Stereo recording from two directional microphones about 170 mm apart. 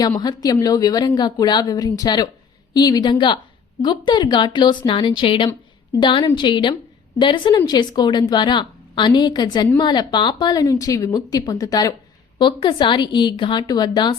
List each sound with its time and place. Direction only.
0.2 s a woman's voice: 20° left (ahead or behind)